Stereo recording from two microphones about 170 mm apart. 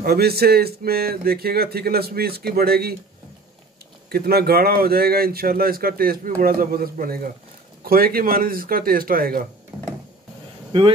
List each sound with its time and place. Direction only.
0.0 s speech: 65° right (ahead or behind)
4.1 s speech: 65° right (ahead or behind)